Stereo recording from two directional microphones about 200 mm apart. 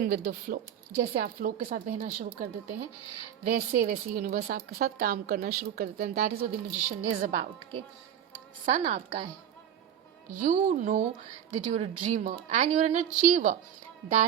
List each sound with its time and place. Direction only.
0.0 s a woman's voice: 50° right (ahead or behind); by 7.4 s 35° right (ahead or behind)
8.6 s a woman's voice: 35° right (ahead or behind)
10.3 s a woman's voice: 40° right (ahead or behind)